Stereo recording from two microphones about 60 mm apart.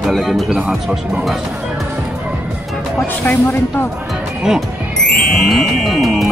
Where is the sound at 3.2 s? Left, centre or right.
Left.